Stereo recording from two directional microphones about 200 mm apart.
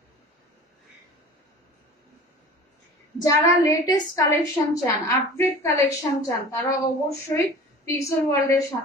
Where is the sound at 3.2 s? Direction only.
15° left (ahead or behind).